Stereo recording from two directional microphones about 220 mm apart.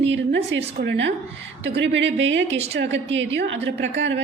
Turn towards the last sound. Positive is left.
turn(degrees=-55)  # may be behind; listen again after turning